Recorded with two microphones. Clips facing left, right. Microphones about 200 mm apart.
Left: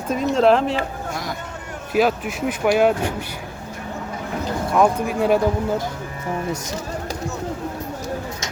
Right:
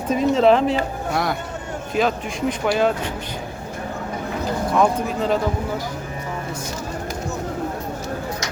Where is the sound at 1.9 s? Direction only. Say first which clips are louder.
Left 2 dB; 5° left (ahead or behind).